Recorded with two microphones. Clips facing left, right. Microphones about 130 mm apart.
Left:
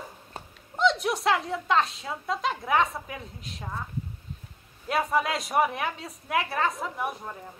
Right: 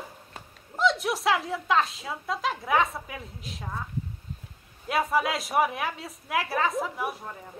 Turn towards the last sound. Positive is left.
turn(degrees=0)  # may be behind; listen again after turning